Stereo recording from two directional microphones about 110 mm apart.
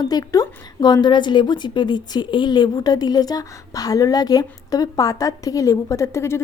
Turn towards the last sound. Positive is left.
turn(degrees=25)  # may be behind; listen again after turning